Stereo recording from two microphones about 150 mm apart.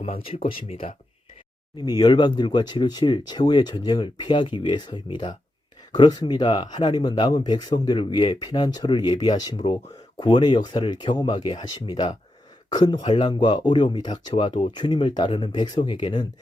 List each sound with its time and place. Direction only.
0.0 s speech: 40° left (ahead or behind)